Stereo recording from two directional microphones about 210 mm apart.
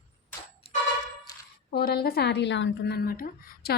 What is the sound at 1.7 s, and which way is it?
Speech, 45° left (ahead or behind).